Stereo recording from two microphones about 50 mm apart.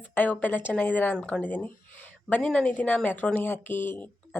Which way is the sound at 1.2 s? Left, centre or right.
Left.